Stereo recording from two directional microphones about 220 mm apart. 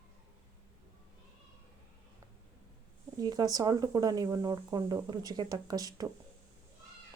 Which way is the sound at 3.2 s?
20° right (ahead or behind).